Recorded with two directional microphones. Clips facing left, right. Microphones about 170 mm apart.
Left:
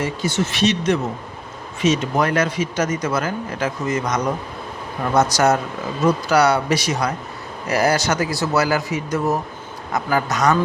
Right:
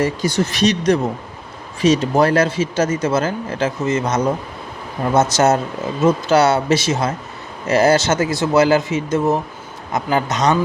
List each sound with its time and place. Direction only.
0.0 s speech: 40° right (ahead or behind); by 10.6 s 20° right (ahead or behind)